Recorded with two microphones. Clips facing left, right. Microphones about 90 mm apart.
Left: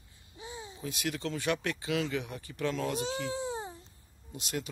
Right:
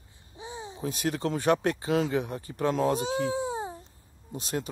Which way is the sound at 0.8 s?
40° right (ahead or behind).